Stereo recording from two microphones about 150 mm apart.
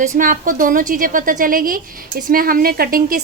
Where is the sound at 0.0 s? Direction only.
65° right (ahead or behind).